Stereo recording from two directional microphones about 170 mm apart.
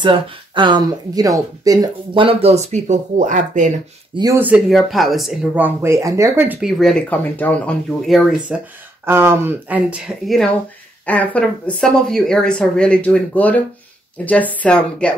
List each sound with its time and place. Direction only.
0.0 s speech: 30° right (ahead or behind); by 3.7 s 45° right (ahead or behind)
4.4 s speech: 10° right (ahead or behind)
6.6 s speech: centre (ahead or behind)
8.1 s speech: 5° right (ahead or behind)
9.0 s speech: 15° right (ahead or behind); by 15.1 s 5° left (ahead or behind)